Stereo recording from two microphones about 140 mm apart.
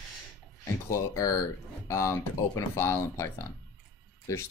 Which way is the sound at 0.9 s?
25° left (ahead or behind).